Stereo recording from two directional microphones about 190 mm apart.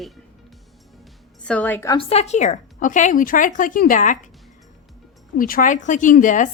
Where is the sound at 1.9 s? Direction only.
35° left (ahead or behind).